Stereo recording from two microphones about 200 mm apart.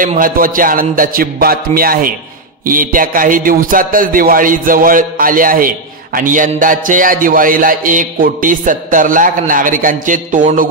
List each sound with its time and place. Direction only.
0.0 s speech: 45° right (ahead or behind)